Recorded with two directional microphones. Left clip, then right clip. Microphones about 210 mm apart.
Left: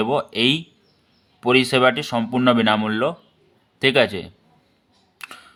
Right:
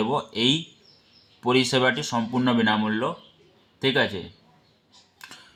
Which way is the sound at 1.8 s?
25° left (ahead or behind).